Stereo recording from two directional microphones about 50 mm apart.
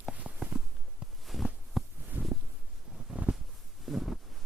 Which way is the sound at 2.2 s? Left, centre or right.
Right.